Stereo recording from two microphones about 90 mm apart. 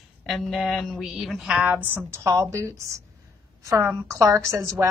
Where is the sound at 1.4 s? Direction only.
10° right (ahead or behind).